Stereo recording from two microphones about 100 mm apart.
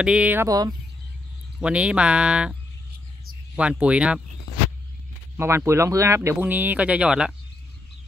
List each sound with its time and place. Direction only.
0.0 s speech: 10° right (ahead or behind)
0.5 s speech: 35° right (ahead or behind)
1.6 s speech: 10° right (ahead or behind)
3.5 s speech: 10° right (ahead or behind)
5.4 s speech: 25° right (ahead or behind)
6.4 s speech: 15° right (ahead or behind)